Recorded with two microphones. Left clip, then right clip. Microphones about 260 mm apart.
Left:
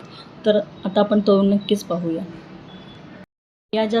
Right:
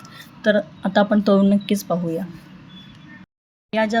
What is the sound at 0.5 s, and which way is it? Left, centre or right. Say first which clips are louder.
Speech: right 1 dB; right.